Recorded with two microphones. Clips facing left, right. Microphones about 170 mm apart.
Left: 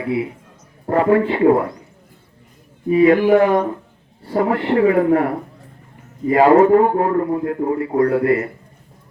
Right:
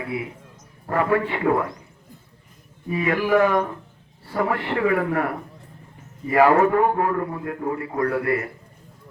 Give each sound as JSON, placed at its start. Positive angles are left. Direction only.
{"t": 0.9, "sound": "a man's voice", "side_deg": 30}
{"t": 2.9, "sound": "a man's voice", "side_deg": 30}